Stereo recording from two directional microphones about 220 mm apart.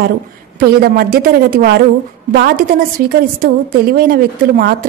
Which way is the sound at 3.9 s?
45° right (ahead or behind).